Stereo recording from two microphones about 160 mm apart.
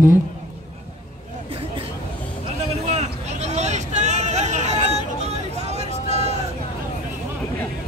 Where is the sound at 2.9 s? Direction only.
45° right (ahead or behind).